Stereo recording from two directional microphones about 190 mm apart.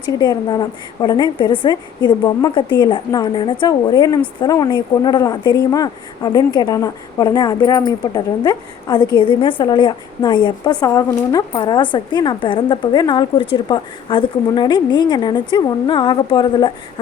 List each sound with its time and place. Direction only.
0.2 s a woman's voice: 20° left (ahead or behind)